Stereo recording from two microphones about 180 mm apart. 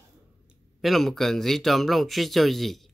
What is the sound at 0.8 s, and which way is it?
Speech, centre (ahead or behind).